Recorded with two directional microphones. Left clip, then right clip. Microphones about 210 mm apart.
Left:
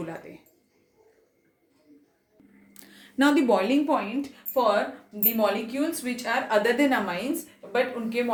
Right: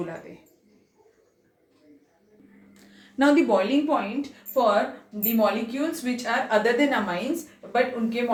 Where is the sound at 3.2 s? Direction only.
45° left (ahead or behind).